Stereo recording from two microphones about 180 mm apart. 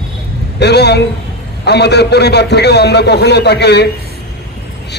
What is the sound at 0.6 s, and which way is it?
A man's voice, 65° left (ahead or behind).